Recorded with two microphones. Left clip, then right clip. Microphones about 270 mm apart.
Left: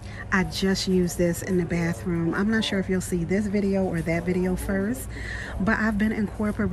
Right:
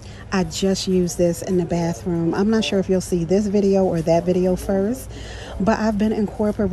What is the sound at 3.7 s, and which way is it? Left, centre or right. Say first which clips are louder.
Speech: right 9 dB; left.